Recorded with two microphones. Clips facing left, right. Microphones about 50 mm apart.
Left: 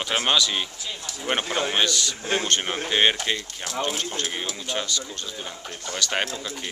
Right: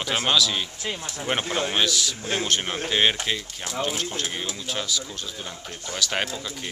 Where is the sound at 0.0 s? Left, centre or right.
Centre.